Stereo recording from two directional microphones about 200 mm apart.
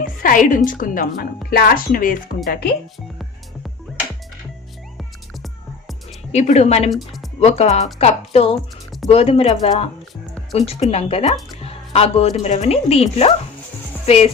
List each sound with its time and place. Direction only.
0.0 s a woman's voice: 45° left (ahead or behind)
6.3 s a woman's voice: 35° left (ahead or behind)
6.9 s a woman's voice: centre (ahead or behind)
7.3 s a woman's voice: 30° left (ahead or behind)
11.6 s music: 30° left (ahead or behind)
12.4 s a woman's voice: 35° left (ahead or behind)